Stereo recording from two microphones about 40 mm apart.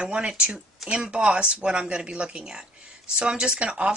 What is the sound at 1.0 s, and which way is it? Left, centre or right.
Speech, right.